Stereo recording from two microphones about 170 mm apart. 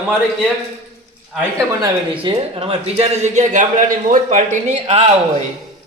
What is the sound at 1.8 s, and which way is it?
Speech, 30° right (ahead or behind).